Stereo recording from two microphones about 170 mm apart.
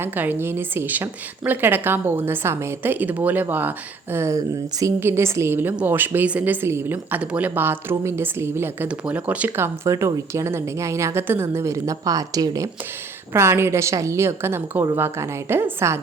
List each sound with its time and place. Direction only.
0.0 s a woman's voice: 10° right (ahead or behind)